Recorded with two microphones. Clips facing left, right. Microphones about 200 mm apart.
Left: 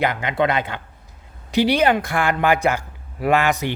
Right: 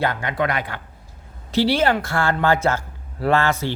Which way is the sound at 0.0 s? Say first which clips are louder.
Left 2 dB; 20° left (ahead or behind).